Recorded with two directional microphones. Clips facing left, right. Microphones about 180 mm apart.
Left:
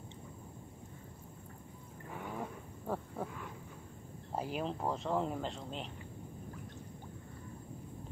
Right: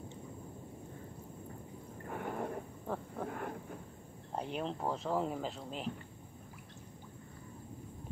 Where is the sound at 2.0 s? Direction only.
55° right (ahead or behind).